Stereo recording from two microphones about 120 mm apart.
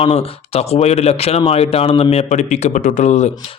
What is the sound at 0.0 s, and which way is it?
Speech, 55° left (ahead or behind).